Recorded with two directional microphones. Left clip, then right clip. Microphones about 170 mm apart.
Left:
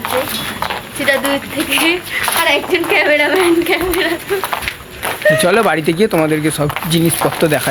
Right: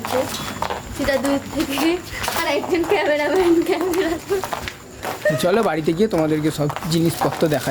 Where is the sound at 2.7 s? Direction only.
30° right (ahead or behind).